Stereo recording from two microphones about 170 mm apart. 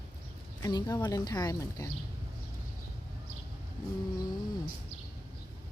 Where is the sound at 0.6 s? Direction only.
20° left (ahead or behind).